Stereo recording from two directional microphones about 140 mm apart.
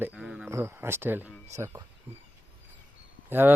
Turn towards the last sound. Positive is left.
turn(degrees=-15)  # may be behind; listen again after turning